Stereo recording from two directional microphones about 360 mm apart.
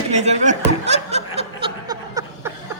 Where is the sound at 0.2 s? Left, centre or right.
Centre.